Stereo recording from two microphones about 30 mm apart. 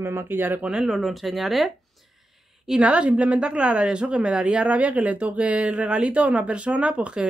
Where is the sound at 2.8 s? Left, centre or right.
Right.